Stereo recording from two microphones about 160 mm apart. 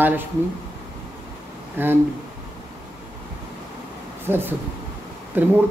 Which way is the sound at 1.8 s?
10° right (ahead or behind).